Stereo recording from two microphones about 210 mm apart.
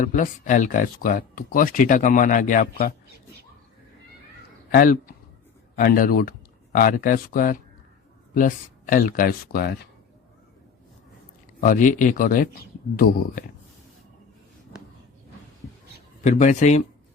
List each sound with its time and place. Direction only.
0.0 s speech: 40° left (ahead or behind)
4.7 s speech: 45° left (ahead or behind)
11.6 s speech: 40° left (ahead or behind)
16.2 s speech: 35° left (ahead or behind)